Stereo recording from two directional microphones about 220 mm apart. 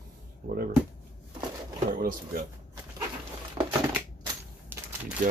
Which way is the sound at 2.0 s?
40° right (ahead or behind).